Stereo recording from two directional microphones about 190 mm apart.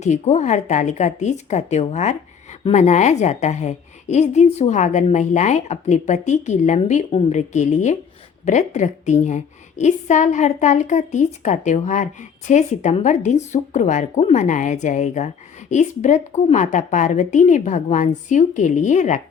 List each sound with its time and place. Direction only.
0.0 s speech: 40° left (ahead or behind)